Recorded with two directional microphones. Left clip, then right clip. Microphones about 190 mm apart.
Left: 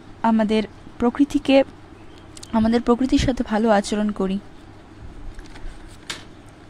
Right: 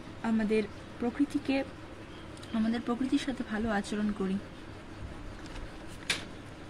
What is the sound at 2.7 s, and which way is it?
A woman's voice, 45° left (ahead or behind).